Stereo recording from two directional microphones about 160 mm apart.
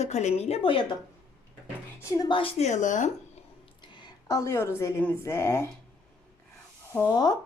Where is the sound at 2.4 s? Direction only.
40° left (ahead or behind).